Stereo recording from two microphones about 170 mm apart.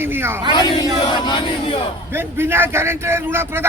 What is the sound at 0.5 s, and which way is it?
Battle cry, 25° left (ahead or behind).